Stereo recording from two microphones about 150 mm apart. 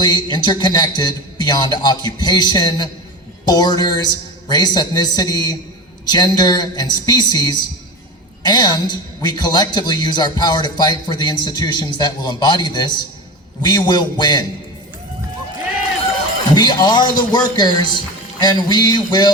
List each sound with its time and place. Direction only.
0.0 s a man's voice: 30° left (ahead or behind)
16.6 s a man's voice: 30° left (ahead or behind)